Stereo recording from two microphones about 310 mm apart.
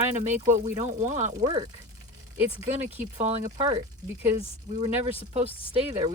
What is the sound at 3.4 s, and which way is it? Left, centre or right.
Speech, centre.